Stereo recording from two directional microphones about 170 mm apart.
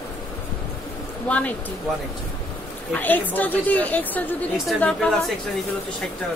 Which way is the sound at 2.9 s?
10° left (ahead or behind).